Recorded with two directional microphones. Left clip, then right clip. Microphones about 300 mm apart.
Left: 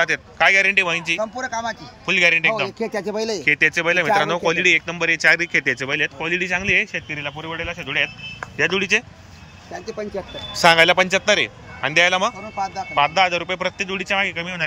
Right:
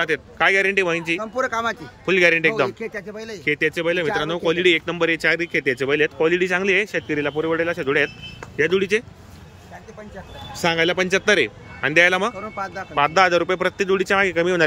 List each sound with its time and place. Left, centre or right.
0.0 s speech: centre
2.8 s speech: left
3.4 s speech: centre
10.6 s speech: centre